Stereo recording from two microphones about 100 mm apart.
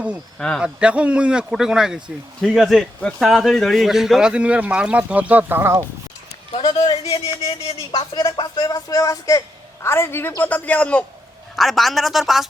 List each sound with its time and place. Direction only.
0.3 s speech: 5° left (ahead or behind)
0.6 s a man's voice: 10° right (ahead or behind)
6.7 s speech: 90° left
7.4 s a sound: 75° left (ahead or behind)
8.1 s speech: 50° left (ahead or behind)
8.6 s speech: 40° left (ahead or behind)
9.8 s a man's voice: 25° left (ahead or behind)
11.5 s a man's voice: centre (ahead or behind)